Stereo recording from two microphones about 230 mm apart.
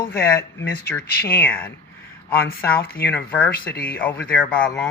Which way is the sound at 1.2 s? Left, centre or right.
Left.